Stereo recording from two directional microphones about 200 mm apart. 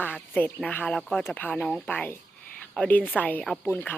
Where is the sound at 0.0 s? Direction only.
10° left (ahead or behind).